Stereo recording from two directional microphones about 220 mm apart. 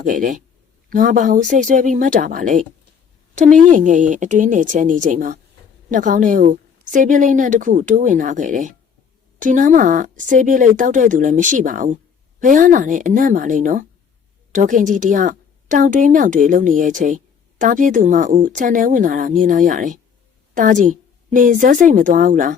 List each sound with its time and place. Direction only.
0.0 s a woman's voice: 35° right (ahead or behind)